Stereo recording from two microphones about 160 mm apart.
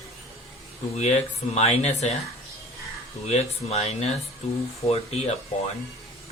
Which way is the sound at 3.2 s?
40° left (ahead or behind).